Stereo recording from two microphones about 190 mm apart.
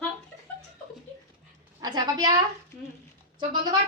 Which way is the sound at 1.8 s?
20° right (ahead or behind).